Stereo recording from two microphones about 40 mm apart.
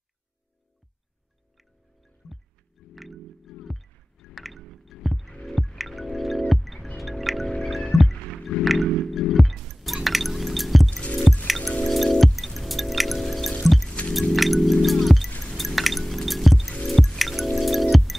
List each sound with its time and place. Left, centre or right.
2.9 s music: centre
5.4 s wind chime: centre
7.5 s music: centre
10.0 s drip: centre
10.9 s drip: left
11.4 s music: centre
11.8 s wind chime: centre
13.6 s music: centre
16.8 s drip: centre
17.2 s wind chime: centre